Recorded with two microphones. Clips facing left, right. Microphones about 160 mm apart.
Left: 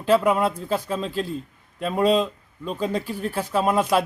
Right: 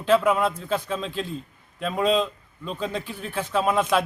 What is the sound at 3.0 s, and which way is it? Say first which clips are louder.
Speech: left 6 dB; 40° left (ahead or behind).